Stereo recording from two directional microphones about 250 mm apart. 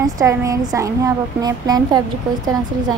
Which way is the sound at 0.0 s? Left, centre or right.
Centre.